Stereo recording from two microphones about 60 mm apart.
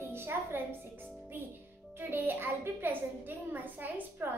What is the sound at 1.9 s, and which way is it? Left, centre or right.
A woman's voice, right.